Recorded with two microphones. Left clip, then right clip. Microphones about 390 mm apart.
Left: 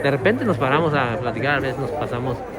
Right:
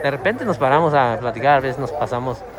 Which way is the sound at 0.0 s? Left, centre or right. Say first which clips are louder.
Left 1 dB; centre.